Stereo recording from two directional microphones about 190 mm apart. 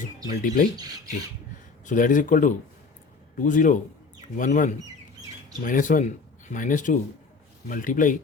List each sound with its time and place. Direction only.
0.3 s speech: 50° left (ahead or behind)
1.8 s speech: 45° left (ahead or behind)